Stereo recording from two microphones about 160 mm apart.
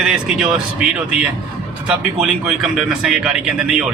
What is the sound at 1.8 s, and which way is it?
Speech, 5° right (ahead or behind).